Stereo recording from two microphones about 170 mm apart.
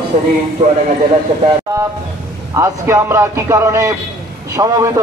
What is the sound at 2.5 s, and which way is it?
A man's voice, 15° right (ahead or behind).